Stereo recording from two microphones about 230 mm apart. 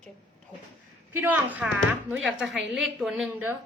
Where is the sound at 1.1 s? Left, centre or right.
Centre.